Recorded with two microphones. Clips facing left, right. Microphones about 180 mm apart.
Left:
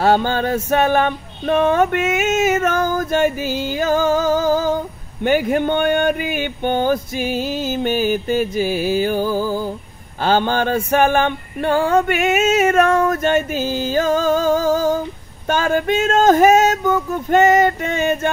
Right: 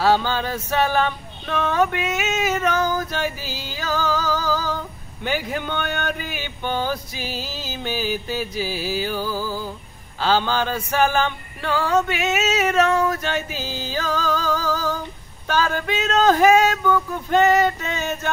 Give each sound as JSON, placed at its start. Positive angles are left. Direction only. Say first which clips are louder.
{"t": 0.0, "sound": "music", "louder": "left 3 dB", "side_deg": 50}